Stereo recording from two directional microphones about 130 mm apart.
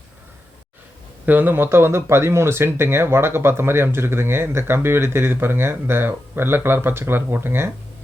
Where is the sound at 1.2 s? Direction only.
15° right (ahead or behind).